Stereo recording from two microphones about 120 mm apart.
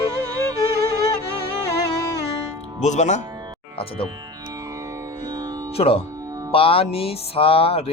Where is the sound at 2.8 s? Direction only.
85° left.